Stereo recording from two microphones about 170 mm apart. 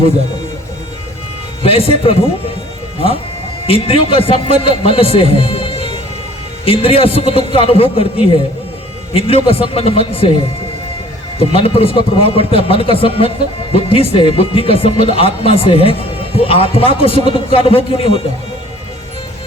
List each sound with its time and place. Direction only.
1.6 s speech: 35° left (ahead or behind)
3.7 s a man's voice: 35° left (ahead or behind)
11.3 s speech: 35° left (ahead or behind)